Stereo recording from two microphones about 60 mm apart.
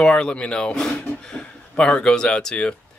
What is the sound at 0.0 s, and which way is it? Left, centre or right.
Speech, centre.